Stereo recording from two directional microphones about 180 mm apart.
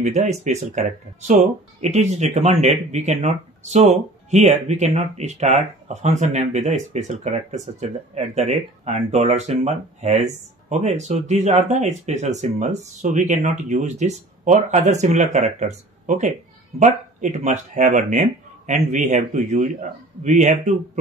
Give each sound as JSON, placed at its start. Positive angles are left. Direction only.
{"t": 0.0, "sound": "speech", "side_deg": -40}